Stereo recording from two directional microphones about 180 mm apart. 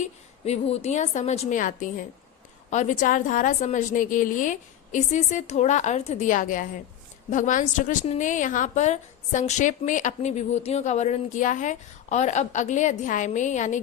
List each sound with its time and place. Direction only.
0.4 s a woman's voice: 35° left (ahead or behind)